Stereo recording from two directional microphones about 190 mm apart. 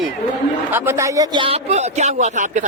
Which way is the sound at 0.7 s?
15° right (ahead or behind).